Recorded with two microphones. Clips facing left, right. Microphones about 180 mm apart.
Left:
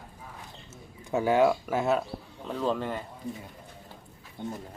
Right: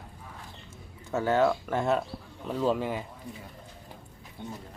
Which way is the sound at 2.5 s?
10° right (ahead or behind).